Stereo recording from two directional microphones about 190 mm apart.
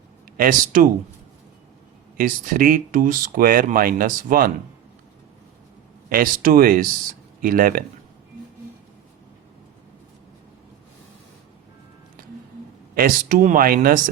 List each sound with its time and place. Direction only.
0.3 s speech: 45° right (ahead or behind)
2.1 s speech: 45° right (ahead or behind)
6.1 s speech: 50° right (ahead or behind)
12.9 s speech: 50° right (ahead or behind)